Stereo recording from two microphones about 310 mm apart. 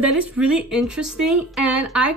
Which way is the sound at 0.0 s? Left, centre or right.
Centre.